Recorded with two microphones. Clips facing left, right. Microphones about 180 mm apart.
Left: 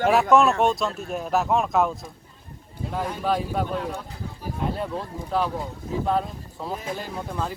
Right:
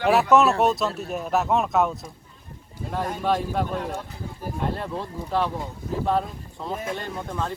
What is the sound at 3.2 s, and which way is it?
Speech, centre (ahead or behind).